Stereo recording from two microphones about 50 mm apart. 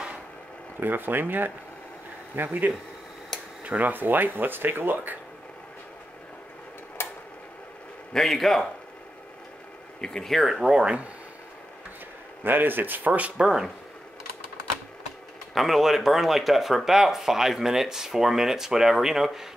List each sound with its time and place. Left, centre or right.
0.7 s speech: right
3.3 s a sound: centre
3.6 s speech: right
7.0 s a sound: left
8.1 s a man's voice: centre
9.9 s speech: centre
10.2 s speech: centre
10.6 s speech: centre
12.4 s speech: right
15.5 s speech: centre